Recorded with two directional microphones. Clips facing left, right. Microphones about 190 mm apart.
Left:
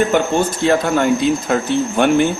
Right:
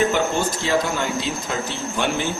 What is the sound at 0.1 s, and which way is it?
Speech, 55° left (ahead or behind).